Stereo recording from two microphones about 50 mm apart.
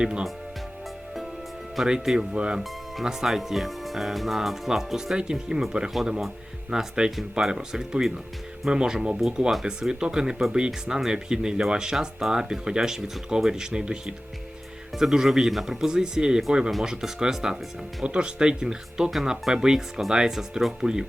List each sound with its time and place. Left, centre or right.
0.0 s speech: centre
1.7 s speech: centre